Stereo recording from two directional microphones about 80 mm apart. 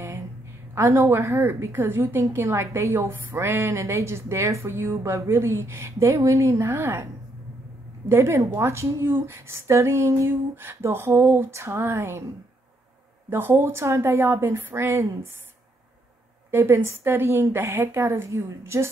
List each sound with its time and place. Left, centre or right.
0.7 s a woman's voice: right
8.1 s a woman's voice: right
13.3 s a woman's voice: right
16.4 s a woman's voice: right